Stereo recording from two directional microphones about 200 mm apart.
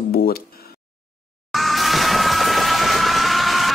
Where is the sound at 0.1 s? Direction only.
50° left (ahead or behind).